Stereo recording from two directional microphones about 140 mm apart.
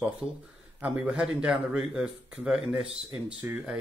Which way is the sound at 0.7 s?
10° right (ahead or behind).